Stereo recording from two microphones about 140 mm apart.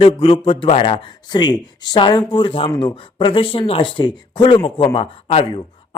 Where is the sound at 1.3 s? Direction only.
30° left (ahead or behind).